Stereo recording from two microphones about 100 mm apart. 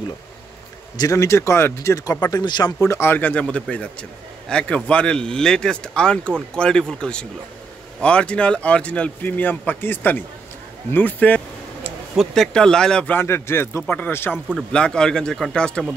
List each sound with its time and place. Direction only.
0.9 s a man's voice: 35° left (ahead or behind)
2.4 s speech: 45° left (ahead or behind)
2.8 s speech: 30° left (ahead or behind)
12.2 s speech: 5° left (ahead or behind)
13.2 s speech: 25° left (ahead or behind)
14.7 s speech: 10° left (ahead or behind)